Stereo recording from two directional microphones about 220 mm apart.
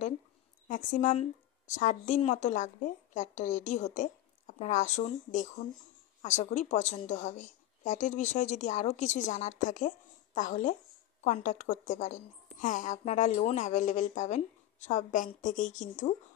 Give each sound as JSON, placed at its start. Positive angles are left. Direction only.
{"t": 0.7, "sound": "a woman's voice", "side_deg": 35}